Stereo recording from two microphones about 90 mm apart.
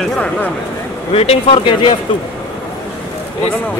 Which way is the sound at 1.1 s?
65° left (ahead or behind).